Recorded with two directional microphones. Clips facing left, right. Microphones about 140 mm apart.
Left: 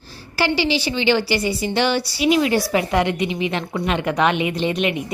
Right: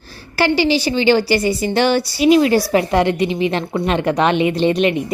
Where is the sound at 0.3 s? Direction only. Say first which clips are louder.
Right 4 dB; 50° right (ahead or behind).